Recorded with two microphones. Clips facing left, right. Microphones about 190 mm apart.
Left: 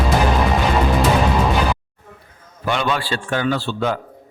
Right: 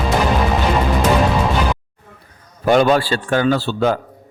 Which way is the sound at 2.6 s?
40° right (ahead or behind).